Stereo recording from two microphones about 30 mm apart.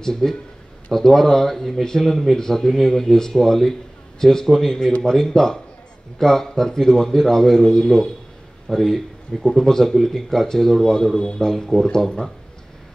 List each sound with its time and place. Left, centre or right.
0.0 s a man's voice: centre
4.5 s a man's voice: centre